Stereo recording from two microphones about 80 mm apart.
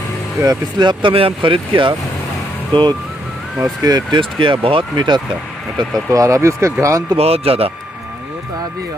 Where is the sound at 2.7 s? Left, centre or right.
Right.